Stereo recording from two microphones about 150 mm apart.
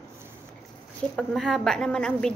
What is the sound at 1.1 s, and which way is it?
A woman's voice, 5° left (ahead or behind).